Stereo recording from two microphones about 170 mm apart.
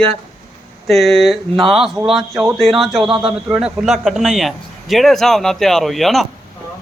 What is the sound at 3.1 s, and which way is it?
Speech, 30° right (ahead or behind).